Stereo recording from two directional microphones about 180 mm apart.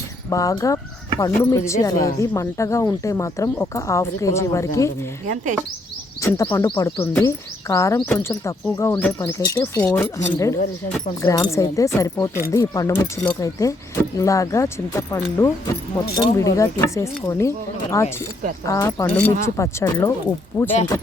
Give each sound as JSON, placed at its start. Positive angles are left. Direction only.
{"t": 0.3, "sound": "speech", "side_deg": 20}
{"t": 6.1, "sound": "speech", "side_deg": 15}